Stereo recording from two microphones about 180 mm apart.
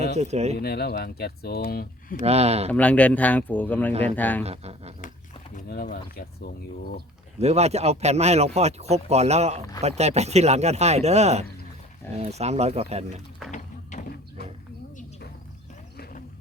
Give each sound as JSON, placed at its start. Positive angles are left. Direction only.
{"t": 0.2, "sound": "speech", "side_deg": -35}
{"t": 0.5, "sound": "speech", "side_deg": 60}
{"t": 2.2, "sound": "speech", "side_deg": -35}
{"t": 2.7, "sound": "speech", "side_deg": 10}
{"t": 4.4, "sound": "speech", "side_deg": -35}
{"t": 5.5, "sound": "speech", "side_deg": 50}
{"t": 7.3, "sound": "speech", "side_deg": -35}
{"t": 13.9, "sound": "a sound", "side_deg": 40}